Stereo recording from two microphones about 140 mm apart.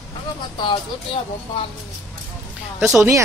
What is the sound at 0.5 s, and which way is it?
Speech, 35° left (ahead or behind).